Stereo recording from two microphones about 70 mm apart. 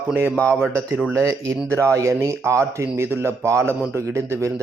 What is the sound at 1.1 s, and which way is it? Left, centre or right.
A man's voice, right.